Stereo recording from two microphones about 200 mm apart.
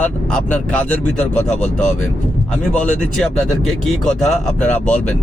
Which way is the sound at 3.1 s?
5° left (ahead or behind).